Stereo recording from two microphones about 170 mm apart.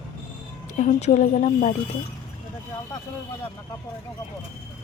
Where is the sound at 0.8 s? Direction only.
45° left (ahead or behind).